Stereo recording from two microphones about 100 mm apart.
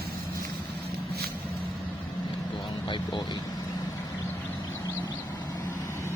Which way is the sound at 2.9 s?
55° left (ahead or behind).